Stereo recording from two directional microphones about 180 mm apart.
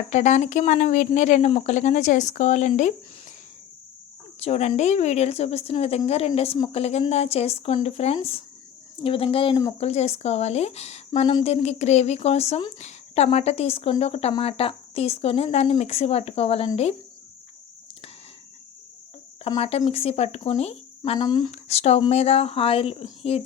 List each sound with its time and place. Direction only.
0.1 s a woman's voice: 40° left (ahead or behind)
4.4 s a woman's voice: 35° left (ahead or behind)
19.5 s a woman's voice: 35° left (ahead or behind)
21.2 s speech: 25° left (ahead or behind)
21.5 s a woman's voice: 35° left (ahead or behind)